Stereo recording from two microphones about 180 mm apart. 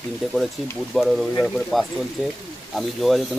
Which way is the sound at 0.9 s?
Centre (ahead or behind).